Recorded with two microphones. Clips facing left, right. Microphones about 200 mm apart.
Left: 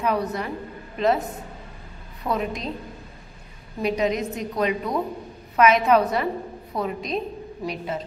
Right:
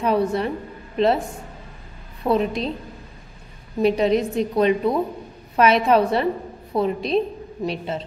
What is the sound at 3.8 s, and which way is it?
A woman's voice, 30° right (ahead or behind).